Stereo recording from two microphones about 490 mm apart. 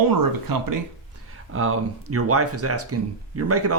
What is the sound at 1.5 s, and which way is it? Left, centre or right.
Speech, right.